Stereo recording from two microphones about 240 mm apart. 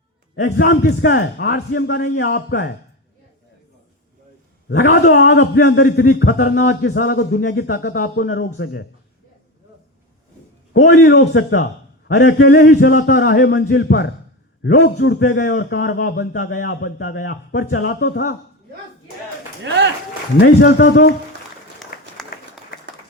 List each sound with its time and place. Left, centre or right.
0.4 s a man's voice: left
5.1 s a man's voice: left
11.0 s a man's voice: left
19.6 s speech: right
20.4 s a man's voice: left
21.9 s applause: left